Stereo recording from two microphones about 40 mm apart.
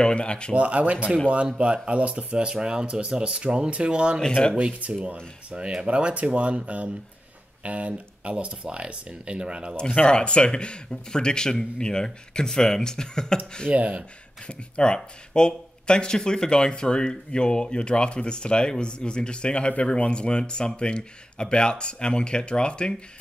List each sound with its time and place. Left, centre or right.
0.0 s speech: left
0.6 s speech: right
9.8 s speech: left
13.7 s speech: right
14.4 s speech: left